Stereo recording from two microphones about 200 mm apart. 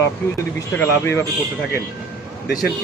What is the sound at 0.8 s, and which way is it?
Speech, 15° left (ahead or behind).